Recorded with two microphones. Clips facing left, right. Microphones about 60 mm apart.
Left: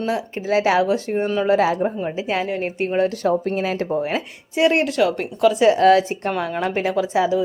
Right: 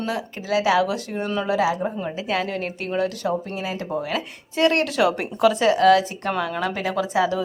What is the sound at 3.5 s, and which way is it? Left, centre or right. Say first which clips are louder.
Speech: left 6 dB; left.